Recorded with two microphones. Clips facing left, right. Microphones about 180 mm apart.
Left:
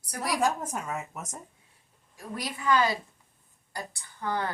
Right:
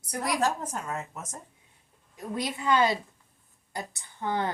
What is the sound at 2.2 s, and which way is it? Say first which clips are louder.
A woman's voice: right 4 dB; 20° right (ahead or behind).